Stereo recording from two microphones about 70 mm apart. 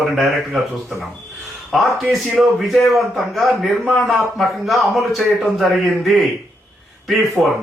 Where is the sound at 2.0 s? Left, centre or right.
Centre.